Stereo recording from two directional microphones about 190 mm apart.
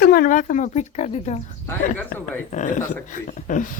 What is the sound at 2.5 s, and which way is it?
Speech, 40° left (ahead or behind).